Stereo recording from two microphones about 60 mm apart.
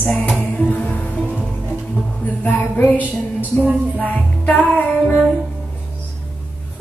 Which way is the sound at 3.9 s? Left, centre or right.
Left.